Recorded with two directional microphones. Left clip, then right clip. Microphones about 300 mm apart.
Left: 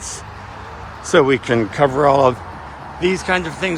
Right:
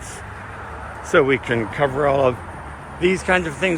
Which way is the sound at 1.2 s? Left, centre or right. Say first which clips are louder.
Left 3 dB; centre.